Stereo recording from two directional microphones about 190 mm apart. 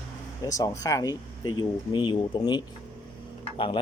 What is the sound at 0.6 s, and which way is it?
Speech, 15° left (ahead or behind).